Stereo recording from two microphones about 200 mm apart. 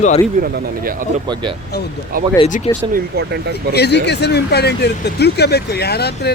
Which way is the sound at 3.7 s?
55° left (ahead or behind).